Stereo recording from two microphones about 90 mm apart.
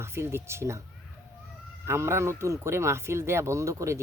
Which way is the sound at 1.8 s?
30° right (ahead or behind).